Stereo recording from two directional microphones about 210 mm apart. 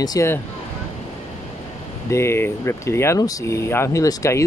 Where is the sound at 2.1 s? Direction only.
15° left (ahead or behind).